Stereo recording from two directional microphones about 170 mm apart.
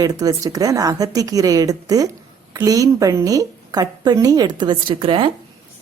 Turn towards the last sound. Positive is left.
turn(degrees=-30)  # may be behind; listen again after turning